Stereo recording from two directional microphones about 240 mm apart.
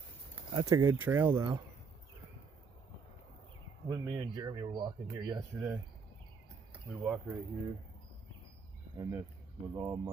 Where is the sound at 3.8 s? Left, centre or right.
Centre.